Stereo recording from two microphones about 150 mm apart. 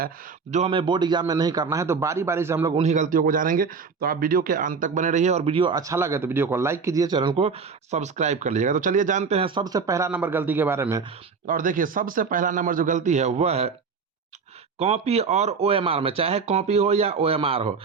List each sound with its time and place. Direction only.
0.5 s a man's voice: 40° right (ahead or behind); by 2.7 s 15° right (ahead or behind)
2.7 s speech: 50° right (ahead or behind); by 7.3 s 30° right (ahead or behind)
7.3 s speech: 45° right (ahead or behind)
9.6 s speech: 25° right (ahead or behind)
10.1 s a man's voice: 10° right (ahead or behind)
11.4 s speech: 65° right (ahead or behind); by 13.7 s 45° right (ahead or behind)
14.8 s speech: 45° right (ahead or behind)